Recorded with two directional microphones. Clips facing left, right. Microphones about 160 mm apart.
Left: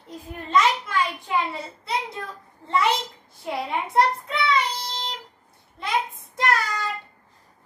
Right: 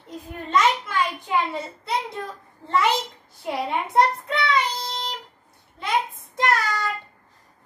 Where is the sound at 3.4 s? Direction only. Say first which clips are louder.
Right 2 dB; centre (ahead or behind).